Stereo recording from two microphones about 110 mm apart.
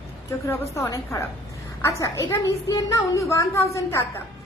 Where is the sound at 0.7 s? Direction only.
30° left (ahead or behind).